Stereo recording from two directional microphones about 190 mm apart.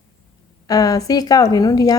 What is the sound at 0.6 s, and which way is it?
A woman's voice, 20° left (ahead or behind).